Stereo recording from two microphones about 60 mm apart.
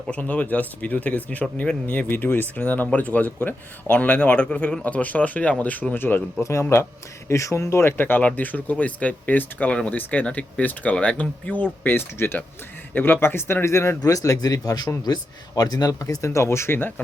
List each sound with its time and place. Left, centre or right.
0.1 s speech: left
5.9 s speech: left
6.4 s speech: left
7.9 s speech: left
14.0 s speech: left